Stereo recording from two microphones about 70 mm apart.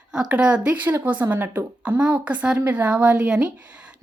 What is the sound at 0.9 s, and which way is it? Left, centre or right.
A woman's voice, right.